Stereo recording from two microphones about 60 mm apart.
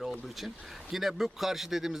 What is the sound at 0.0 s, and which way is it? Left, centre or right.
Speech, centre.